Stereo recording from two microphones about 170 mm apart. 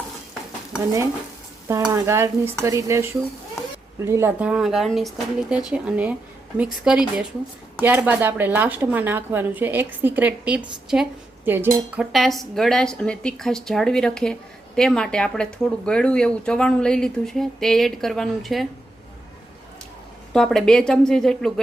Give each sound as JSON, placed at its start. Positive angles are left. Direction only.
{"t": 1.9, "sound": "speech", "side_deg": -15}
{"t": 12.1, "sound": "speech", "side_deg": 0}
{"t": 20.3, "sound": "speech", "side_deg": 5}